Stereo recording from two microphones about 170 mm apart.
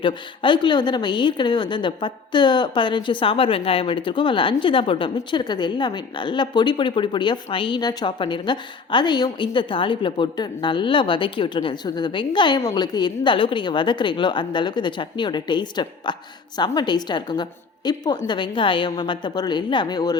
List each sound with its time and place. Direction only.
0.0 s a woman's voice: 30° left (ahead or behind)